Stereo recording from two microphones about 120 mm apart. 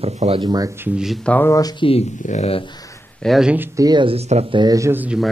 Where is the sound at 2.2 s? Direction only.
75° left (ahead or behind).